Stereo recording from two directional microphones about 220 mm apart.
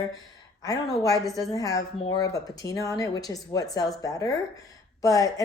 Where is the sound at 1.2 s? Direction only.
Centre (ahead or behind).